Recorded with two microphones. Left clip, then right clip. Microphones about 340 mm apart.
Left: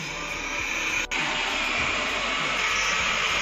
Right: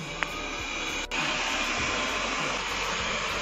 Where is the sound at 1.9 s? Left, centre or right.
Centre.